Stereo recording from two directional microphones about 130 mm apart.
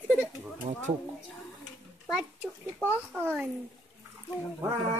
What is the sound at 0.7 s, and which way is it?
Speech, 65° right (ahead or behind).